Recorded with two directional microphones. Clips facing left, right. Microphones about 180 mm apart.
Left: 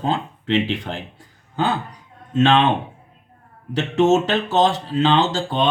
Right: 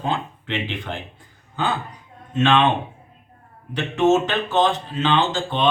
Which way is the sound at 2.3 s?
40° left (ahead or behind).